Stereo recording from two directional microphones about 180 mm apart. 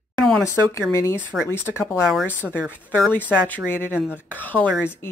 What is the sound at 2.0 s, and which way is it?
Speech, 5° right (ahead or behind).